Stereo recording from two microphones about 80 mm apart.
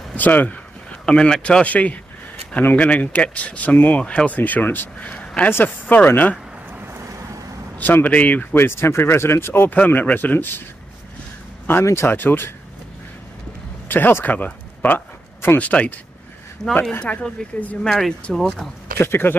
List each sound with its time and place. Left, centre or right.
0.1 s speech: left
1.0 s speech: centre
7.7 s speech: left
11.6 s speech: left
13.8 s speech: left
16.6 s speech: centre
17.8 s speech: centre
18.9 s speech: left